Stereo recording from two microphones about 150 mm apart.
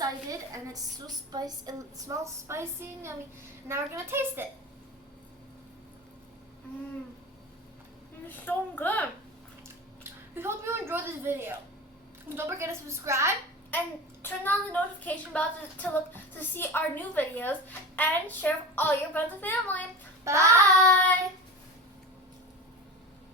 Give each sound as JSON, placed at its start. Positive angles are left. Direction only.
{"t": 0.0, "sound": "a woman's voice", "side_deg": -25}
{"t": 8.4, "sound": "a child's voice", "side_deg": 10}
{"t": 10.0, "sound": "a woman's voice", "side_deg": -15}
{"t": 13.7, "sound": "a child's voice", "side_deg": 15}
{"t": 20.2, "sound": "a woman's voice", "side_deg": -20}